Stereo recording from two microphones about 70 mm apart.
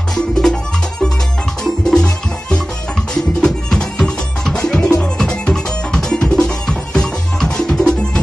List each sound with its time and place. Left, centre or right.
0.1 s music: centre
1.6 s music: centre